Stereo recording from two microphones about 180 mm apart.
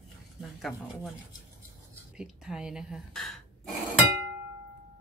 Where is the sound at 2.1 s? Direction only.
5° right (ahead or behind).